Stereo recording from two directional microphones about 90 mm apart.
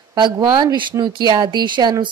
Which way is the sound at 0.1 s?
55° right (ahead or behind).